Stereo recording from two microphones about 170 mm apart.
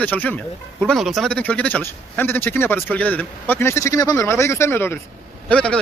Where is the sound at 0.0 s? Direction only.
10° left (ahead or behind).